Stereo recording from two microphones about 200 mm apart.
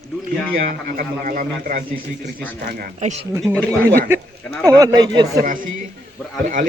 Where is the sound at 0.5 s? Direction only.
45° right (ahead or behind).